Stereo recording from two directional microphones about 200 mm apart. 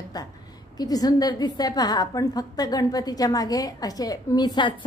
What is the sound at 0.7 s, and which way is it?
A woman's voice, 20° left (ahead or behind).